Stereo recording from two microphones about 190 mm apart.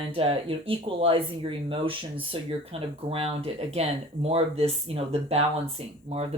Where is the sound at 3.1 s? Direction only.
30° right (ahead or behind).